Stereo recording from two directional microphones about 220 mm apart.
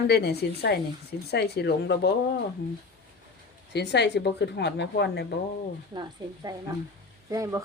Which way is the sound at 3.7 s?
50° left (ahead or behind).